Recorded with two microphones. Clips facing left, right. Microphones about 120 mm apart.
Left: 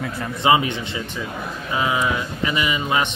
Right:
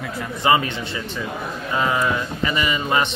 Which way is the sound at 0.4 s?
15° left (ahead or behind).